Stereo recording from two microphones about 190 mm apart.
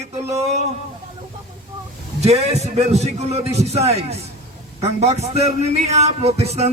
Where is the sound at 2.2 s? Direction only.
35° right (ahead or behind).